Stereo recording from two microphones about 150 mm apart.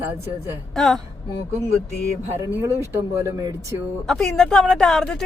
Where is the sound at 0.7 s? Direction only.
5° left (ahead or behind).